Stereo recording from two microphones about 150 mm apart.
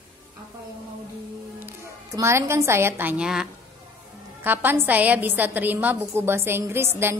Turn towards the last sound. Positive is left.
turn(degrees=-15)  # may be behind; listen again after turning